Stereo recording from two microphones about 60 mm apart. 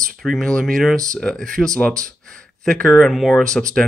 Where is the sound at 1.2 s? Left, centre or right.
Centre.